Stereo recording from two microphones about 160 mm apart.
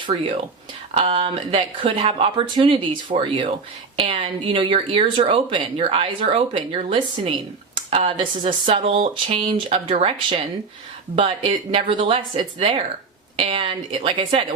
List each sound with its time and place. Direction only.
0.9 s speech: 35° right (ahead or behind)